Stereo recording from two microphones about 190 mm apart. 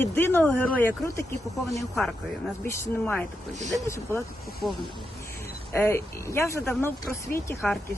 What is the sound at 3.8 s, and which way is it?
Speech, 15° left (ahead or behind).